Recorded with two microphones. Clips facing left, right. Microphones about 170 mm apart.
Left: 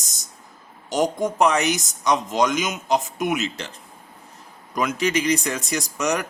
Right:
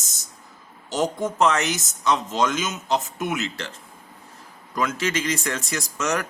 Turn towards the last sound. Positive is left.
turn(degrees=15)  # may be behind; listen again after turning